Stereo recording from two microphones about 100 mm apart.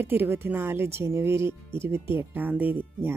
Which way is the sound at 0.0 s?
20° right (ahead or behind).